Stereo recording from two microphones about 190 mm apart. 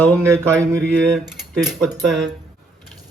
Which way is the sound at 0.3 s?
5° left (ahead or behind).